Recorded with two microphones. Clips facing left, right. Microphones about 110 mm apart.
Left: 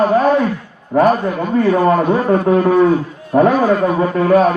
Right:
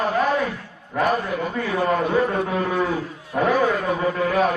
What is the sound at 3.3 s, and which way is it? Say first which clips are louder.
A man's voice: left 8 dB; 45° left (ahead or behind).